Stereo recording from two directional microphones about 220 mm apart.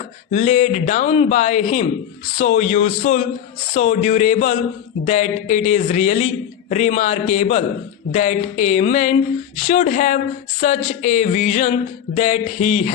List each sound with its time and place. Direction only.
0.3 s a man's voice: 30° left (ahead or behind)